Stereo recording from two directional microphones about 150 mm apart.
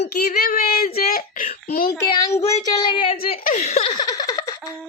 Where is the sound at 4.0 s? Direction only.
25° left (ahead or behind).